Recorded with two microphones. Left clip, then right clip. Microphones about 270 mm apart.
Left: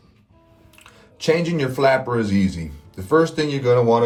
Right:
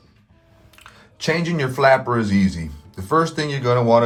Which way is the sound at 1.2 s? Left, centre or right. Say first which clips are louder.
Left 2 dB; right.